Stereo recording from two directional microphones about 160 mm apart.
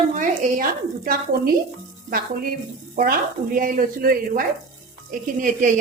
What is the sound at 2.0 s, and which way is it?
Sizzle, 65° right (ahead or behind).